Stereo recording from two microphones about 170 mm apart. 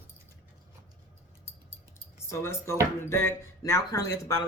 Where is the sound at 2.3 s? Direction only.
15° left (ahead or behind).